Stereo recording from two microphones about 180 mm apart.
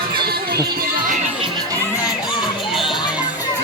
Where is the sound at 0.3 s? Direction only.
60° right (ahead or behind).